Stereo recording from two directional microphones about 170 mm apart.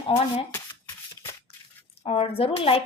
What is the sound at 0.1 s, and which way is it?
Speech, 30° left (ahead or behind).